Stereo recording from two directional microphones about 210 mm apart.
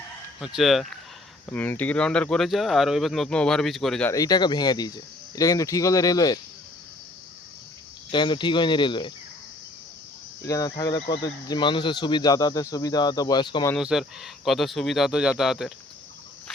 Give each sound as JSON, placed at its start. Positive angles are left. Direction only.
{"t": 0.3, "sound": "speech", "side_deg": 0}
{"t": 4.1, "sound": "speech", "side_deg": 20}
{"t": 8.1, "sound": "speech", "side_deg": 20}
{"t": 10.4, "sound": "speech", "side_deg": 15}
{"t": 13.7, "sound": "speech", "side_deg": 0}